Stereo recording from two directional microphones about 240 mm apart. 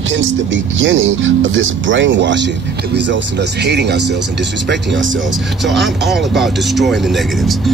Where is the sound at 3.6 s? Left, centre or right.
Right.